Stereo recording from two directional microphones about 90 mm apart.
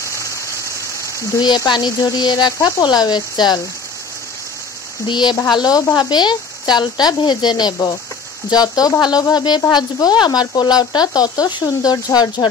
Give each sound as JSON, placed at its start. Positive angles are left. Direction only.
{"t": 0.0, "sound": "rain", "side_deg": 35}
{"t": 1.7, "sound": "speech", "side_deg": 50}
{"t": 5.0, "sound": "speech", "side_deg": 55}